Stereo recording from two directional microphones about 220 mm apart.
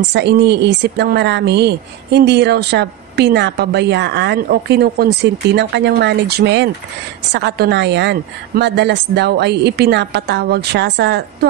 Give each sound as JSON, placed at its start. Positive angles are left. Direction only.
{"t": 0.1, "sound": "a woman's voice", "side_deg": -50}